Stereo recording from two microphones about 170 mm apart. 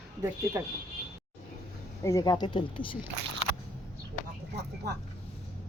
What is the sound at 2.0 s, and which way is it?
Speech, 20° left (ahead or behind).